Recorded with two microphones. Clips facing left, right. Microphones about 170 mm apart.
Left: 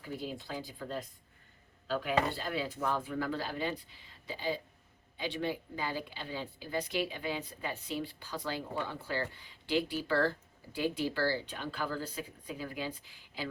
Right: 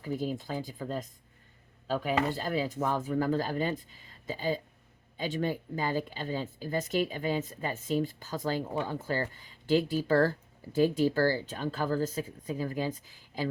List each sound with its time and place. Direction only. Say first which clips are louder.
0.2 s speech: right 6 dB; 45° right (ahead or behind)